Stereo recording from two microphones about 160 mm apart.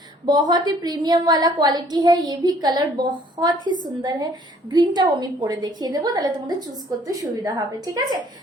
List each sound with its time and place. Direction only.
0.3 s a woman's voice: 25° right (ahead or behind)